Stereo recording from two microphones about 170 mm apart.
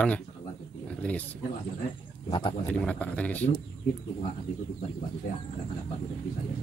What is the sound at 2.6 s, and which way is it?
Speech, 5° left (ahead or behind).